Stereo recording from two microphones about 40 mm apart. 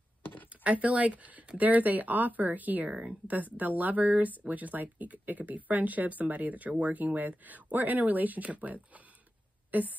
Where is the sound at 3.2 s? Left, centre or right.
Right.